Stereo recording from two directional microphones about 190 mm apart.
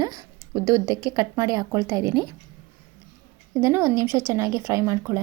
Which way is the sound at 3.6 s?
15° right (ahead or behind).